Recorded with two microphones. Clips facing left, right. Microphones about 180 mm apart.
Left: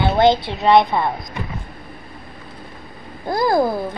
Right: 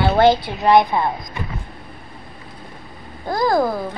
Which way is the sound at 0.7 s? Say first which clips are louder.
Even; 15° right (ahead or behind).